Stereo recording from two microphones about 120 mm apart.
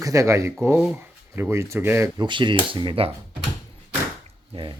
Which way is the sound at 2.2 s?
40° right (ahead or behind).